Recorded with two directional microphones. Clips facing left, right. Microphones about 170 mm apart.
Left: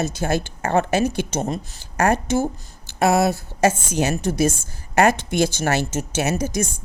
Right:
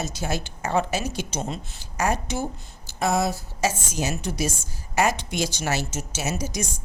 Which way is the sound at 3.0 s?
70° left (ahead or behind).